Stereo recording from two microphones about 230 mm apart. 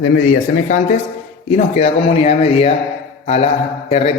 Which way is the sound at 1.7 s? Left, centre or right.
Left.